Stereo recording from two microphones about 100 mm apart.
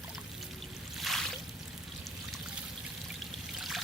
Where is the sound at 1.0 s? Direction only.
Centre (ahead or behind).